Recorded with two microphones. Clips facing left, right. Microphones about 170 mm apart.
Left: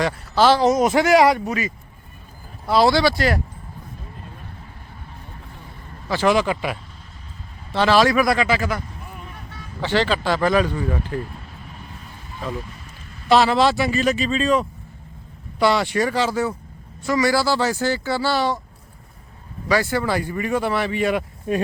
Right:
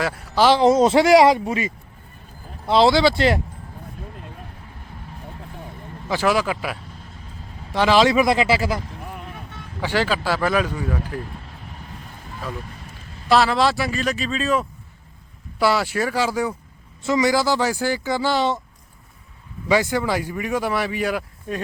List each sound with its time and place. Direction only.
0.3 s speech: 15° right (ahead or behind)
0.6 s a man's voice: 30° right (ahead or behind)
6.2 s speech: 5° right (ahead or behind)
7.7 s a man's voice: 15° right (ahead or behind); by 8.8 s 30° right (ahead or behind)
9.8 s speech: 10° right (ahead or behind)
13.2 s speech: centre (ahead or behind); by 18.6 s 20° right (ahead or behind)
19.6 s speech: 15° right (ahead or behind)